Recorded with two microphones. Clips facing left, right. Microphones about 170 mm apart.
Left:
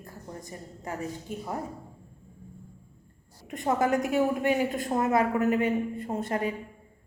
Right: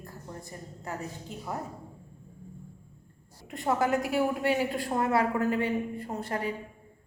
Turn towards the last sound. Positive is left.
turn(degrees=25)  # may be behind; listen again after turning